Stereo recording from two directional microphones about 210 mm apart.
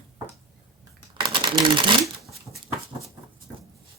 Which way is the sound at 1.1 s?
25° right (ahead or behind).